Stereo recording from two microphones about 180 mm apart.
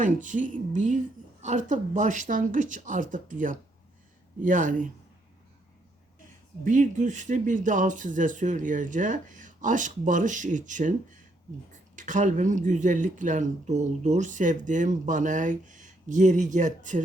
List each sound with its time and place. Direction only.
0.0 s speech: 45° right (ahead or behind)
6.7 s speech: 45° right (ahead or behind)